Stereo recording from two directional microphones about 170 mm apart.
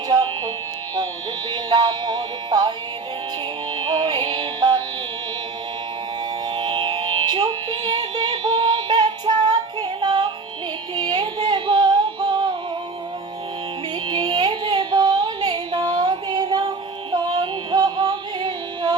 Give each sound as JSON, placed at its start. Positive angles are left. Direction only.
{"t": 0.1, "sound": "music", "side_deg": -25}
{"t": 3.8, "sound": "music", "side_deg": -25}
{"t": 6.5, "sound": "music", "side_deg": -25}
{"t": 10.9, "sound": "synthetic singing", "side_deg": -25}
{"t": 14.1, "sound": "music", "side_deg": -25}